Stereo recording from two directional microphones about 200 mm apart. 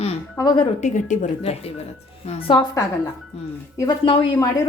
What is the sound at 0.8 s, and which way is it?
Speech, 35° left (ahead or behind).